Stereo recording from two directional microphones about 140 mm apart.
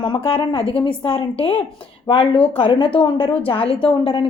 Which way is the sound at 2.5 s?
40° left (ahead or behind).